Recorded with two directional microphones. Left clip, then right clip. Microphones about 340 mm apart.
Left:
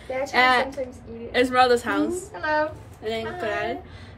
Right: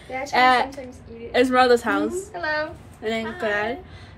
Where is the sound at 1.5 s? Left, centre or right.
Centre.